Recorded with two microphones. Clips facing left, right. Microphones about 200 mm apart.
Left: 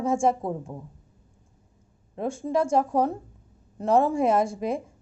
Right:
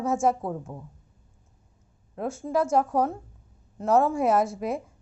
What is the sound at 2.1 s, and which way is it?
Speech, 5° right (ahead or behind).